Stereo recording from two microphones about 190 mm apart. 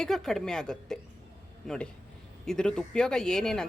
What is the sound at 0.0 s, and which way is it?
Speech, 5° left (ahead or behind).